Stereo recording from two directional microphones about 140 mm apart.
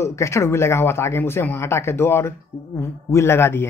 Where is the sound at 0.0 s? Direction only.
20° left (ahead or behind).